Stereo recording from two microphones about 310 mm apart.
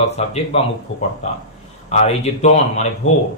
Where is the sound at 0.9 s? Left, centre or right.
Left.